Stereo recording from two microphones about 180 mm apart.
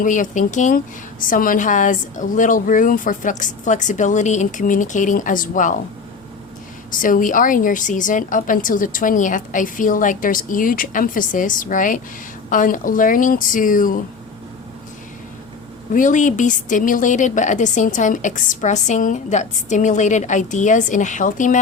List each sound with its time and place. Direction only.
0.0 s a woman's voice: 45° left (ahead or behind)
6.9 s a woman's voice: 50° left (ahead or behind)
15.9 s a woman's voice: 45° left (ahead or behind)